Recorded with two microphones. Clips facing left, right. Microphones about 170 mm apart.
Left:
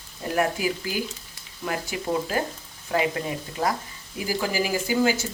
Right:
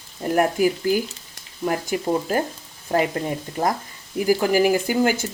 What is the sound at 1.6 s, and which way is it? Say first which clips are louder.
A woman's voice: right 5 dB; 45° right (ahead or behind).